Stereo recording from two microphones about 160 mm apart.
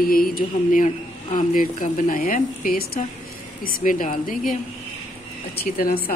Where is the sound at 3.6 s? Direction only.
55° left (ahead or behind).